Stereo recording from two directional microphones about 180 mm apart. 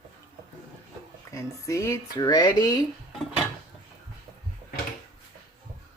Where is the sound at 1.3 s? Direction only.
15° left (ahead or behind).